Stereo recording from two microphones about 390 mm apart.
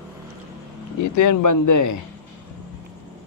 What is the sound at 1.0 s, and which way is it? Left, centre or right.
Speech, left.